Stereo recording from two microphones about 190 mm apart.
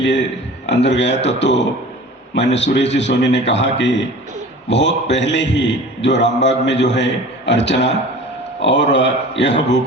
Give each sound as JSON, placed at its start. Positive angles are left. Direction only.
{"t": 0.0, "sound": "a man's voice", "side_deg": 70}